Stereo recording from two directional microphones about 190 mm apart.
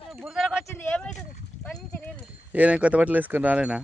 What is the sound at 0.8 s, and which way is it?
Speech, 10° left (ahead or behind).